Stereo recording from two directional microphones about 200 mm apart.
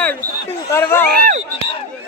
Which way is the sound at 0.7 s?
10° left (ahead or behind).